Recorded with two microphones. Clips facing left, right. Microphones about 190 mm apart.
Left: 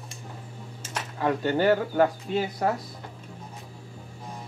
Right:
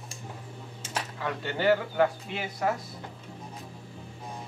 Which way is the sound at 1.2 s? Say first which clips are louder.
Left 5 dB; 45° left (ahead or behind).